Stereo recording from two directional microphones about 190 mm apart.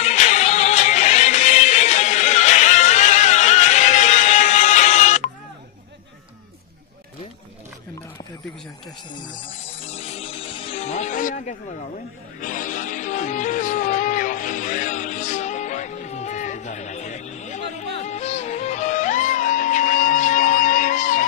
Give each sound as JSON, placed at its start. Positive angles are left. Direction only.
{"t": 0.0, "sound": "music", "side_deg": 35}
{"t": 9.1, "sound": "speech", "side_deg": 25}
{"t": 9.8, "sound": "music", "side_deg": 35}